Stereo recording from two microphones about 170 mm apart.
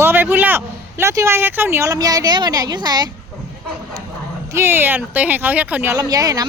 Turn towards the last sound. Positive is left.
turn(degrees=-20)  # may be behind; listen again after turning